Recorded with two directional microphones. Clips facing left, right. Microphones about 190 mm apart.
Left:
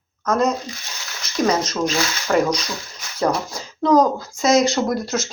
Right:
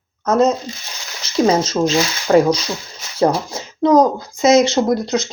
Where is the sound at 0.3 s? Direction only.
25° right (ahead or behind).